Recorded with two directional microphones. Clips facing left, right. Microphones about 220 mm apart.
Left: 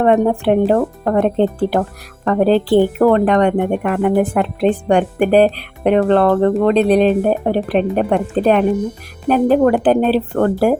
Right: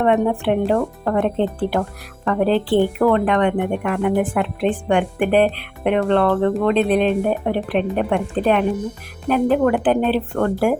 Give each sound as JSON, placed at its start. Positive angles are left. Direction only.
{"t": 0.0, "sound": "speech", "side_deg": 40}